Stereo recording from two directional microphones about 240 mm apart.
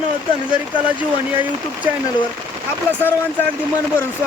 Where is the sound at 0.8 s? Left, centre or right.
Centre.